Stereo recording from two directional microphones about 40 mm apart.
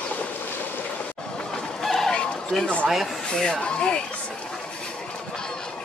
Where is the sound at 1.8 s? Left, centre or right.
Centre.